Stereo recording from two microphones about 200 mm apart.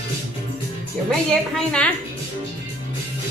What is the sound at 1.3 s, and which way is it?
Speech, 5° left (ahead or behind).